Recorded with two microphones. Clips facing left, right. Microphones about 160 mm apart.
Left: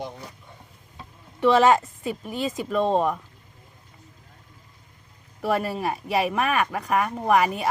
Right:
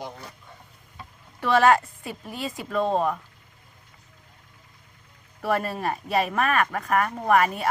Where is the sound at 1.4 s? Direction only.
20° left (ahead or behind).